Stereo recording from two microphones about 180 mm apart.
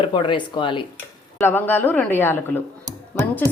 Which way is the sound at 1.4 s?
10° left (ahead or behind).